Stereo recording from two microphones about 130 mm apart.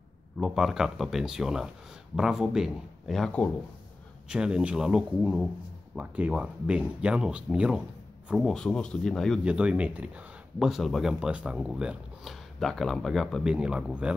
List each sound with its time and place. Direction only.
0.4 s speech: 5° right (ahead or behind)
4.3 s speech: 5° right (ahead or behind)
8.5 s speech: 5° left (ahead or behind)
9.4 s speech: 10° right (ahead or behind)